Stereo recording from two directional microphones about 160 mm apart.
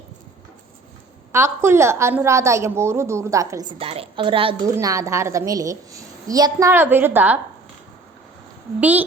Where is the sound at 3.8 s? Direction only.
35° right (ahead or behind).